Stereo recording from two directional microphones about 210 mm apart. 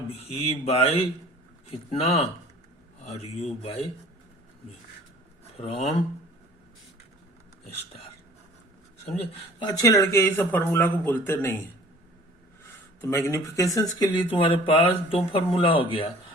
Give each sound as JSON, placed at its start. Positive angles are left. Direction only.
{"t": 0.3, "sound": "speech", "side_deg": 30}
{"t": 5.5, "sound": "speech", "side_deg": 30}
{"t": 9.6, "sound": "a man's voice", "side_deg": 15}
{"t": 13.0, "sound": "a man's voice", "side_deg": 15}